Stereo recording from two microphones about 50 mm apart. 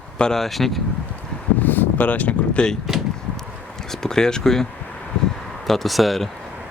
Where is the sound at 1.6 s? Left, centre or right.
Left.